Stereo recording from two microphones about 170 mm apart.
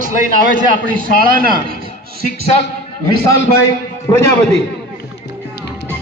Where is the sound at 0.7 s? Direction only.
55° right (ahead or behind).